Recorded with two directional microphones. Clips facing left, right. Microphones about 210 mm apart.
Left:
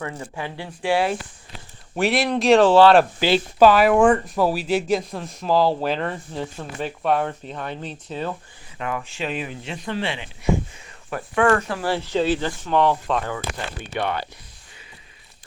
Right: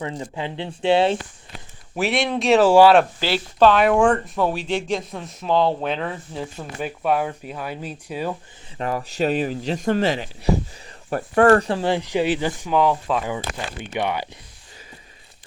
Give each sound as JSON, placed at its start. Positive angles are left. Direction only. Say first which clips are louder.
{"t": 0.2, "sound": "speech", "louder": "right 3 dB", "side_deg": -20}
{"t": 2.0, "sound": "speech", "louder": "left 1 dB", "side_deg": 0}
{"t": 3.2, "sound": "speech", "louder": "left 2 dB", "side_deg": 15}
{"t": 3.7, "sound": "speech", "louder": "even", "side_deg": 5}
{"t": 8.8, "sound": "speech", "louder": "right 5 dB", "side_deg": -35}
{"t": 12.7, "sound": "speech", "louder": "even", "side_deg": 0}